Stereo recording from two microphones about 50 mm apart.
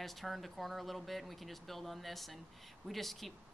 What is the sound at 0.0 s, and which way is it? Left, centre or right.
Speech, centre.